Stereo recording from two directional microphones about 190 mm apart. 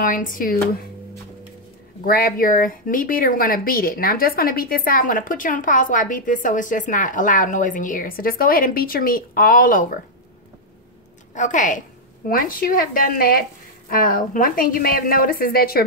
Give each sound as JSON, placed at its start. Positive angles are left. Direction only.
{"t": 0.0, "sound": "speech", "side_deg": 45}
{"t": 2.0, "sound": "speech", "side_deg": 50}
{"t": 11.3, "sound": "a woman's voice", "side_deg": 40}